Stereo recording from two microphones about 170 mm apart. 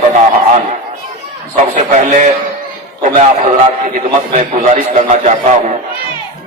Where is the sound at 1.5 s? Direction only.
45° right (ahead or behind).